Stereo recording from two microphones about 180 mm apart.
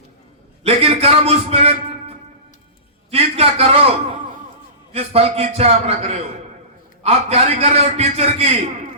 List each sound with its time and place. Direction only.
0.6 s a man's voice: 35° right (ahead or behind)
3.1 s a sound: 35° right (ahead or behind)
4.9 s a man's voice: 35° right (ahead or behind)